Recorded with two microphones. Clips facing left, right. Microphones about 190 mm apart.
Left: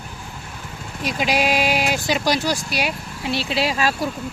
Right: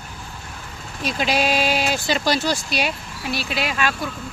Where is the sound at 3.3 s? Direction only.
25° left (ahead or behind).